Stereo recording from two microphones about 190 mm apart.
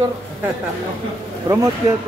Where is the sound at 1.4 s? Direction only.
20° right (ahead or behind).